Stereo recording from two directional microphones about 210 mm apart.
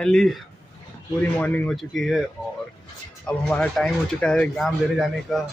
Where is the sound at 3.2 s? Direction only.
5° left (ahead or behind).